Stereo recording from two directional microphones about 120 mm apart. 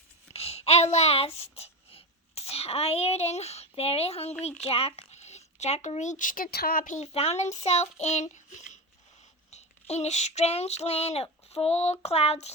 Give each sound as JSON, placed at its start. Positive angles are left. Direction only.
{"t": 0.3, "sound": "a child's voice", "side_deg": 55}
{"t": 7.1, "sound": "child singing", "side_deg": 60}
{"t": 9.5, "sound": "a sound", "side_deg": 65}